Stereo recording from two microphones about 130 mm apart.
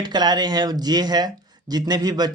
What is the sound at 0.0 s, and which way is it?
Speech, 35° right (ahead or behind).